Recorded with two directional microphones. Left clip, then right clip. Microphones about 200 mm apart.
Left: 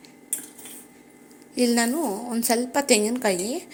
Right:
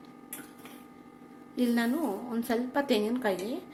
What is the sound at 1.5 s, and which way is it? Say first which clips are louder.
A woman's voice: left 7 dB; 40° left (ahead or behind).